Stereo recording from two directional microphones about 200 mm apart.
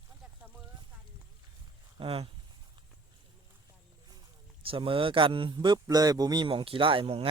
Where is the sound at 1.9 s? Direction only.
30° right (ahead or behind).